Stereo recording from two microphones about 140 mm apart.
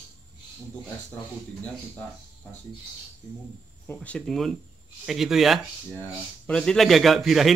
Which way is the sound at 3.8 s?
10° left (ahead or behind).